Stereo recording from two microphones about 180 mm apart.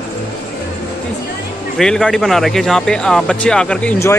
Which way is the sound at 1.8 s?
5° left (ahead or behind).